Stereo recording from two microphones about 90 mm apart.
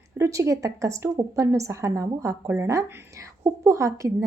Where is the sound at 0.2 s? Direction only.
35° right (ahead or behind).